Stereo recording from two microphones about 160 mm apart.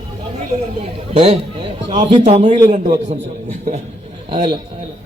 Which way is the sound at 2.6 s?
55° right (ahead or behind).